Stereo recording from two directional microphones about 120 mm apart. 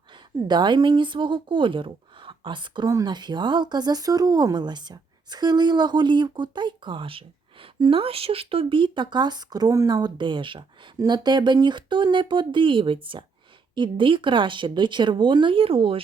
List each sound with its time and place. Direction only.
0.4 s speech: 40° right (ahead or behind)